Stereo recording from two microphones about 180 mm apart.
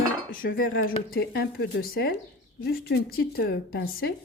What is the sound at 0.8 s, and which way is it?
Speech, 55° left (ahead or behind).